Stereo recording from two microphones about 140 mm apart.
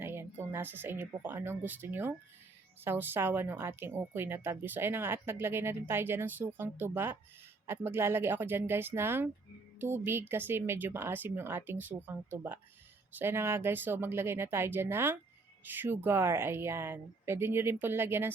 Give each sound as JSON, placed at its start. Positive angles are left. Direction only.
{"t": 0.0, "sound": "speech", "side_deg": -15}